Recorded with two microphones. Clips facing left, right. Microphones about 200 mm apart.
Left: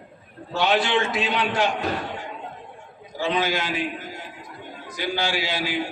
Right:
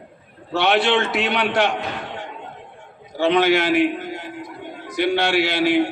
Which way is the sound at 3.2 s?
70° right (ahead or behind).